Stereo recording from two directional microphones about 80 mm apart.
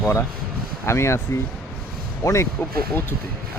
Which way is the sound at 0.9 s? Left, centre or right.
Left.